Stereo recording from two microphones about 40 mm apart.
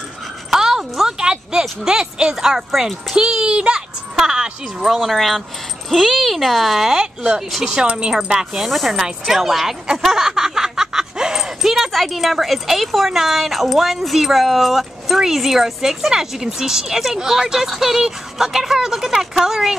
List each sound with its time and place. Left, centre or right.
0.5 s a sound: centre
2.3 s a child's voice: centre
5.1 s speech: centre
7.8 s a child's voice: right
8.1 s speech: centre
8.5 s speech: centre
10.0 s a sound: centre
11.9 s speech: centre